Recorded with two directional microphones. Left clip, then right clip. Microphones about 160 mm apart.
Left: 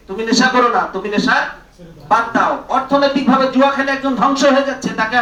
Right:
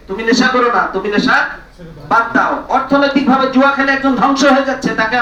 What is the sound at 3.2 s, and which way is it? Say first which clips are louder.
A man's voice: right 1 dB; 45° left (ahead or behind).